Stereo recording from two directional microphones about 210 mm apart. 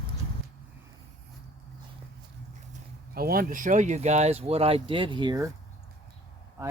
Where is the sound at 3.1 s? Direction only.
45° right (ahead or behind); by 5.5 s 20° right (ahead or behind).